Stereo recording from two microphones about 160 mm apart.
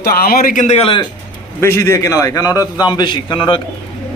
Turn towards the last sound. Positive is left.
turn(degrees=30)  # may be behind; listen again after turning